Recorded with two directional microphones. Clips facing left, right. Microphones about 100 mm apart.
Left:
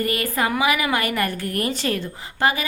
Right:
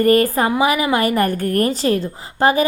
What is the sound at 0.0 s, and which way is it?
A woman's voice, 40° right (ahead or behind).